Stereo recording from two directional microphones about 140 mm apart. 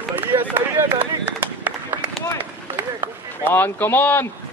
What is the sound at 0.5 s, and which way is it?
Run, 15° right (ahead or behind).